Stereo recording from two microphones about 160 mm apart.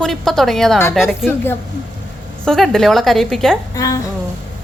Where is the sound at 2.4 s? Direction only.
5° left (ahead or behind).